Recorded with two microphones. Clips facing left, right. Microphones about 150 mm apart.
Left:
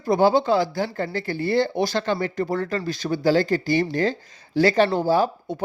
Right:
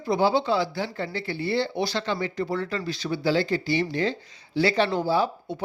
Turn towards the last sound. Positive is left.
turn(degrees=50)  # may be behind; listen again after turning